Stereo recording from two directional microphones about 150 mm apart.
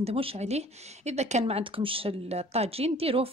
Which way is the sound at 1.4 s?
35° right (ahead or behind).